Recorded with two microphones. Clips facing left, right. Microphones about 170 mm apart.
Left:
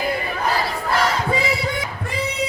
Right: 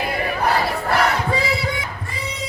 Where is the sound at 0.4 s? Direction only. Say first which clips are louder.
Right 2 dB; 65° right (ahead or behind).